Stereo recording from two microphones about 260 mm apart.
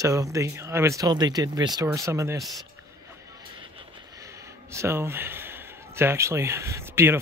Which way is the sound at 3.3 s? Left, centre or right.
Centre.